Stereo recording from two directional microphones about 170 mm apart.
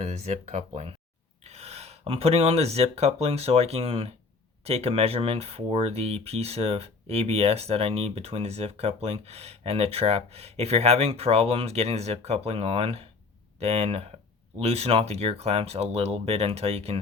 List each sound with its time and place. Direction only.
0.0 s speech: 40° right (ahead or behind)